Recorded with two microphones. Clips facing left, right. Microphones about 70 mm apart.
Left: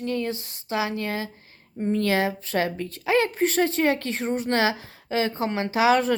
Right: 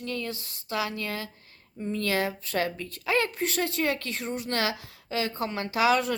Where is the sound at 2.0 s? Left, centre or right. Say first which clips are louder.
Left 1 dB; left.